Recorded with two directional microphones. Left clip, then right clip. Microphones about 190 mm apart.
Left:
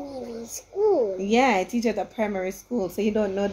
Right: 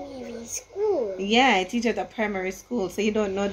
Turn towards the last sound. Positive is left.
turn(degrees=5)  # may be behind; listen again after turning